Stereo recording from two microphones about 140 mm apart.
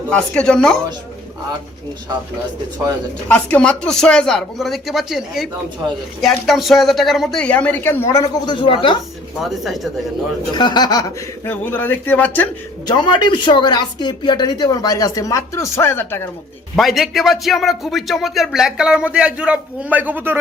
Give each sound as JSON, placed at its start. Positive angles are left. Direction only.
{"t": 0.1, "sound": "speech", "side_deg": 5}
{"t": 3.2, "sound": "a woman's voice", "side_deg": 5}
{"t": 9.4, "sound": "speech", "side_deg": 0}
{"t": 10.5, "sound": "speech", "side_deg": 30}
{"t": 11.4, "sound": "a woman's voice", "side_deg": 15}
{"t": 12.9, "sound": "speech", "side_deg": 30}
{"t": 16.7, "sound": "speech", "side_deg": 0}